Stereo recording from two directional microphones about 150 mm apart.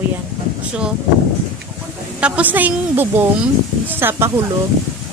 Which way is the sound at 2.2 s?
10° right (ahead or behind).